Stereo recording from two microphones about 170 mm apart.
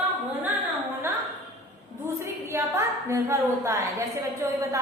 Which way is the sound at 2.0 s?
15° right (ahead or behind).